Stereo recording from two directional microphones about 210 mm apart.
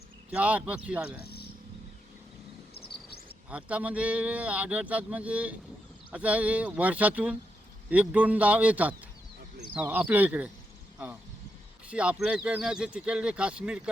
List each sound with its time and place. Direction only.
0.3 s speech: 5° right (ahead or behind)
1.2 s a sound: 50° left (ahead or behind)
3.5 s speech: 5° right (ahead or behind)
11.9 s speech: 5° right (ahead or behind)